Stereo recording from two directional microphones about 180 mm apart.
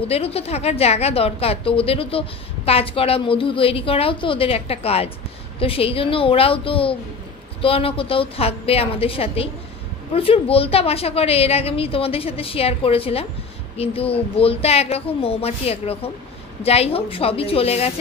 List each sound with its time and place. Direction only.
0.1 s a woman's voice: 35° left (ahead or behind)